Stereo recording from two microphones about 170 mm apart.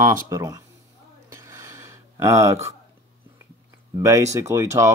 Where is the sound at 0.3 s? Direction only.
20° right (ahead or behind).